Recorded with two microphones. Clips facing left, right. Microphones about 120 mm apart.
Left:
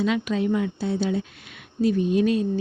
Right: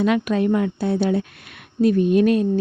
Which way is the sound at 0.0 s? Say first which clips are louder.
Right 4 dB; 55° right (ahead or behind).